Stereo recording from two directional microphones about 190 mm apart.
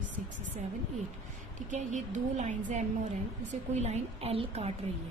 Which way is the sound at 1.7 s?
40° right (ahead or behind).